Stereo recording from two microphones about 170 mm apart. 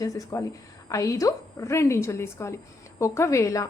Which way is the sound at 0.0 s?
20° left (ahead or behind).